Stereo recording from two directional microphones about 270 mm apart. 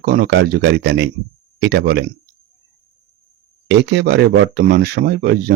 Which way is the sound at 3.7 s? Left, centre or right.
Right.